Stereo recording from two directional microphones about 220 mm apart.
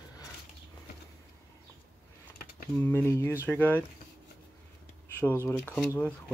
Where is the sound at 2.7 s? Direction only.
10° left (ahead or behind).